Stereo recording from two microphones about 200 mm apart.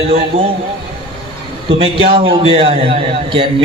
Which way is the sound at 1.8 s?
30° right (ahead or behind).